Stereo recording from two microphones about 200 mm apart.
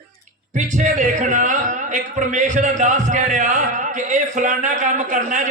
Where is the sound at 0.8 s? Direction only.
40° right (ahead or behind).